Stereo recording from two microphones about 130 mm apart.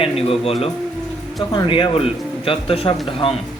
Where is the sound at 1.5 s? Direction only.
40° left (ahead or behind).